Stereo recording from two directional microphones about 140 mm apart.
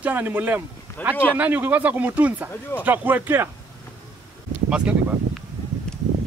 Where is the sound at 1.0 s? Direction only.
10° left (ahead or behind).